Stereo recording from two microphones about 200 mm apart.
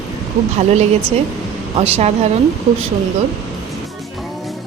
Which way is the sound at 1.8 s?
30° right (ahead or behind).